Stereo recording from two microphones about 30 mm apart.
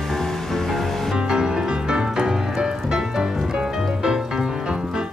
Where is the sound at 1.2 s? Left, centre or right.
Right.